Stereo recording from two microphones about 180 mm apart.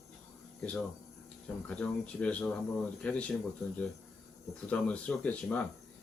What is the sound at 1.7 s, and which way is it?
Speech, 5° left (ahead or behind).